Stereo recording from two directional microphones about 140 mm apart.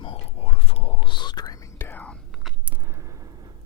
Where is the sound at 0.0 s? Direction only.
45° left (ahead or behind).